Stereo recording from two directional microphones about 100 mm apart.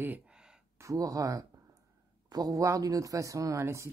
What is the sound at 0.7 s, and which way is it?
Speech, 35° right (ahead or behind).